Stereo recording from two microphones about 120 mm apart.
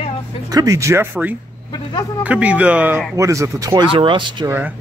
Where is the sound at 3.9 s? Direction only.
45° right (ahead or behind).